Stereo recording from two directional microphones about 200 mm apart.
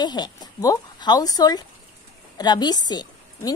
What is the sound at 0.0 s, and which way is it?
A woman's voice, 20° left (ahead or behind).